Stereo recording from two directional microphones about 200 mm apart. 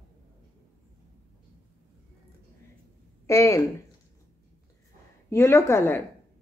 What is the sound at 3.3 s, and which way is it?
Speech, 15° left (ahead or behind).